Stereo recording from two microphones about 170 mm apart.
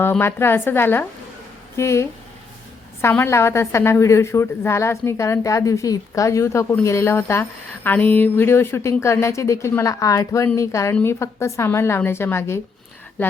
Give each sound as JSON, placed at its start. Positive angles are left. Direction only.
{"t": 0.0, "sound": "a woman's voice", "side_deg": 15}